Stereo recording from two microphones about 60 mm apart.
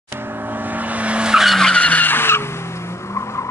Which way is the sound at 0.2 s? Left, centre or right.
Right.